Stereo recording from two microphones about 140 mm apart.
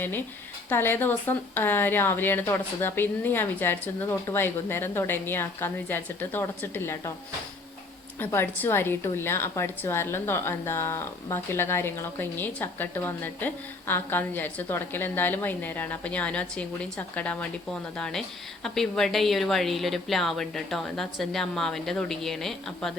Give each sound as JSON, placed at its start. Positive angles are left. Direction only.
{"t": 0.7, "sound": "a woman's voice", "side_deg": 15}
{"t": 8.2, "sound": "a woman's voice", "side_deg": 15}